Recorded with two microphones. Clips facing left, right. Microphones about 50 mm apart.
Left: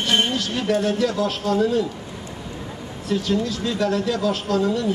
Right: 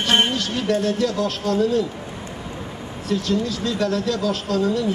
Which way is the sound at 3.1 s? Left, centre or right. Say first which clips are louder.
Even; centre.